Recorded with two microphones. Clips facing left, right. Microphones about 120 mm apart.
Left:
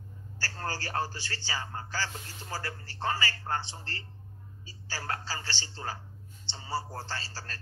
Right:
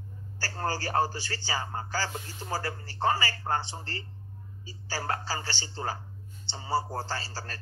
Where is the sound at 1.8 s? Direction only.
45° right (ahead or behind).